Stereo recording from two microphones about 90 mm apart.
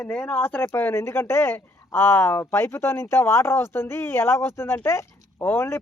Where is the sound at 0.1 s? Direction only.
20° left (ahead or behind).